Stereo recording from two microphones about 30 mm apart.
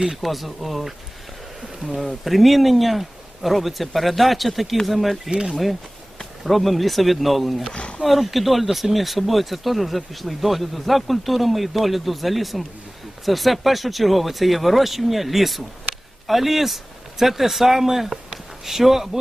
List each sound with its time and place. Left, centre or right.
0.2 s speech: centre
2.2 s speech: centre
7.7 s a sound: left
8.0 s speech: centre